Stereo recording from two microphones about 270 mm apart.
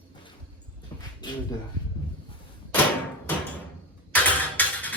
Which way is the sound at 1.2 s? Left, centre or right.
Centre.